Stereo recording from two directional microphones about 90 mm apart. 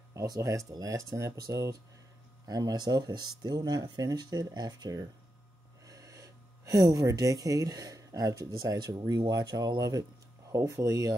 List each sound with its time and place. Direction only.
0.1 s speech: 35° right (ahead or behind)